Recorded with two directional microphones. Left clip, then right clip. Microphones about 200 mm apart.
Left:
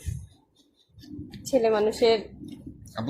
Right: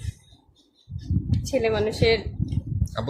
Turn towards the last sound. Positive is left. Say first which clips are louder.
# right 5 dB
turn(degrees=-55)  # may be behind; listen again after turning